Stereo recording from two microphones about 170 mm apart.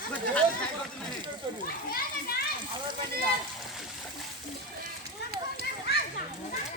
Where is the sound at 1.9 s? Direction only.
60° left (ahead or behind).